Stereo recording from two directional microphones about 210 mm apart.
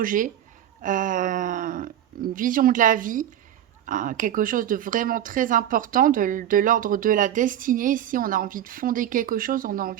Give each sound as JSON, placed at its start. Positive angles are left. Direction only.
{"t": 0.0, "sound": "speech", "side_deg": -40}